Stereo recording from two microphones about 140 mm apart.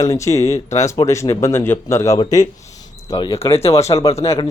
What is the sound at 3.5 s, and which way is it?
Speech, 45° left (ahead or behind).